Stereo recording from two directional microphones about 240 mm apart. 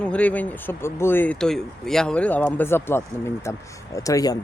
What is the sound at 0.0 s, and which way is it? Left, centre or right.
A woman's voice, centre.